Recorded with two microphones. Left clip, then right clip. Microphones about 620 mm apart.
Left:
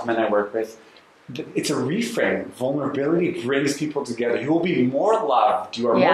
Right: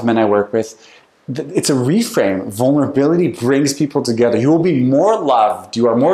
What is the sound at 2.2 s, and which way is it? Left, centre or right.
Speech, right.